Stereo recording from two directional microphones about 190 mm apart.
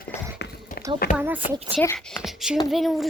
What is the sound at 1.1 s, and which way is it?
Speech, 10° right (ahead or behind).